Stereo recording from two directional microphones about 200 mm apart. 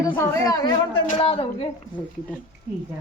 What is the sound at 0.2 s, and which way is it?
A woman's voice, 20° left (ahead or behind).